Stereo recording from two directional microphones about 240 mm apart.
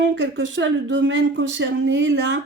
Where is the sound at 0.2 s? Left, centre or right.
Right.